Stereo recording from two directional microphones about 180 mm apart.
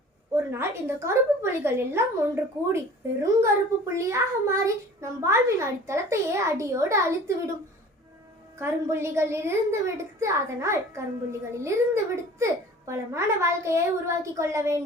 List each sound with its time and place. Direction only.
0.5 s a child's voice: 15° right (ahead or behind)
8.5 s a child's voice: 15° right (ahead or behind)